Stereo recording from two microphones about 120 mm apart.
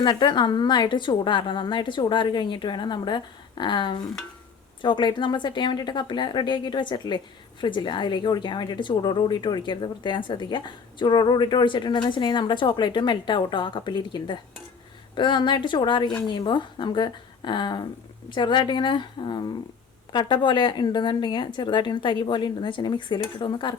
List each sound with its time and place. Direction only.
0.0 s a woman's voice: 40° left (ahead or behind)